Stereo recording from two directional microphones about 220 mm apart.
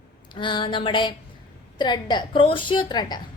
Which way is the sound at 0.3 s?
20° left (ahead or behind).